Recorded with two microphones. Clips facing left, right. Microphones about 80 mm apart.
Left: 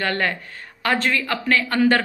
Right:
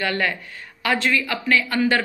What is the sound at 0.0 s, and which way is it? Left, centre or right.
A woman's voice, left.